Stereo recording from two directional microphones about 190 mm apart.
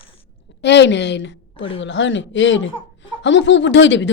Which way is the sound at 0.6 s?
65° left (ahead or behind).